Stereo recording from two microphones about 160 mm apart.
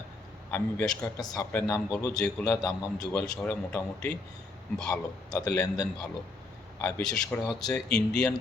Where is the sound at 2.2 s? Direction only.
5° left (ahead or behind).